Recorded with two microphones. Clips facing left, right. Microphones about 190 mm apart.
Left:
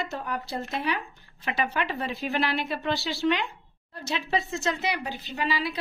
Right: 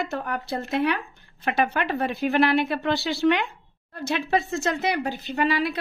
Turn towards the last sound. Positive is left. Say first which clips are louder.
# right 6 dB
turn(degrees=-50)  # may be behind; listen again after turning